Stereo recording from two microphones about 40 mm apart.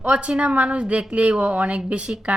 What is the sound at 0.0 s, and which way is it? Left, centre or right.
A woman's voice, right.